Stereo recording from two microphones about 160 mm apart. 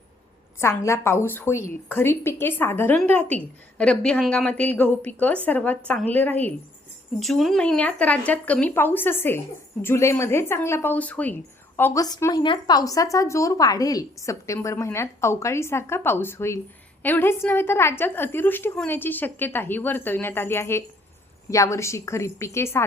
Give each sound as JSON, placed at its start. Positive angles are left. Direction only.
{"t": 0.6, "sound": "a woman's voice", "side_deg": 15}
{"t": 12.0, "sound": "a woman's voice", "side_deg": 25}